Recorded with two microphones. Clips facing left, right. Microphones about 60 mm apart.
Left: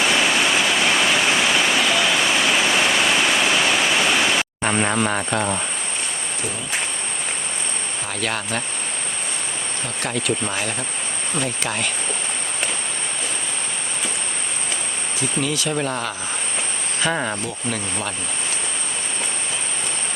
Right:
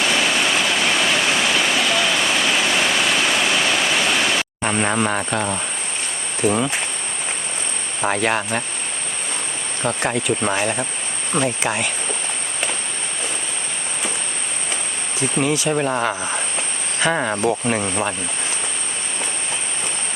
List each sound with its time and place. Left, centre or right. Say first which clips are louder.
0.0 s waterfall: even; centre
4.8 s speech: right 2 dB; centre
6.4 s cricket: right 14 dB; right
8.0 s rub: right 9 dB; right
10.5 s speech: right 5 dB; centre
15.5 s speech: right 4 dB; centre
17.4 s rub: right 8 dB; right
17.7 s speech: right 5 dB; right